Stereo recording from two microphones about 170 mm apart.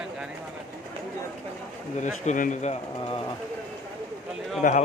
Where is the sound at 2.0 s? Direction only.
45° left (ahead or behind).